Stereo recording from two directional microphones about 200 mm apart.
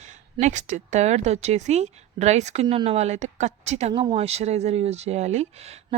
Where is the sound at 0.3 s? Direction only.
35° right (ahead or behind).